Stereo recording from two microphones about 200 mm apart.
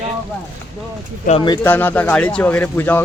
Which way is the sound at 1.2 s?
25° left (ahead or behind).